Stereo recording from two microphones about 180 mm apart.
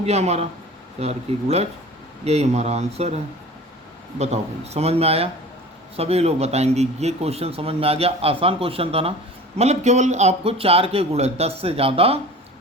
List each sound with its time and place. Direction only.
0.0 s a man's voice: 35° right (ahead or behind)
4.2 s a man's voice: 35° right (ahead or behind)